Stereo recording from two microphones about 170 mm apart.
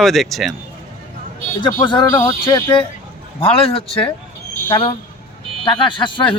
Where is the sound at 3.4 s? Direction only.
35° left (ahead or behind).